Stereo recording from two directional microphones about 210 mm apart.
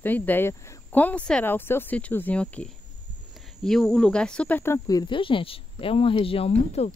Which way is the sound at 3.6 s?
Centre (ahead or behind).